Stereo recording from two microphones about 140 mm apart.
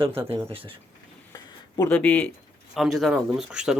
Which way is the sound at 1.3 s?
25° left (ahead or behind).